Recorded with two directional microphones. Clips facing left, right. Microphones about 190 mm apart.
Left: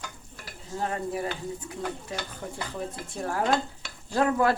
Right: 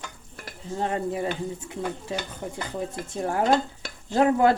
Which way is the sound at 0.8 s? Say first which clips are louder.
Right 3 dB; 25° right (ahead or behind).